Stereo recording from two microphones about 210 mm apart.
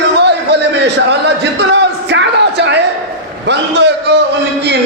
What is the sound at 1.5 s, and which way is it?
Music, 55° right (ahead or behind).